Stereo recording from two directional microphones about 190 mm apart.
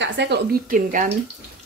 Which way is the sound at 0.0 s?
70° right (ahead or behind).